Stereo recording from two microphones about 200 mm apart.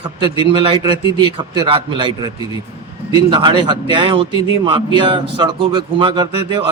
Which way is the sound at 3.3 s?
25° right (ahead or behind).